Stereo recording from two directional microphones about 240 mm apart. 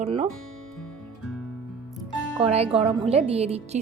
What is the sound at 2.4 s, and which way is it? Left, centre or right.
Speech, right.